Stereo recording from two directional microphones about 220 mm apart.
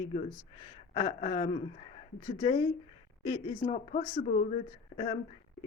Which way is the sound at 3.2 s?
30° left (ahead or behind).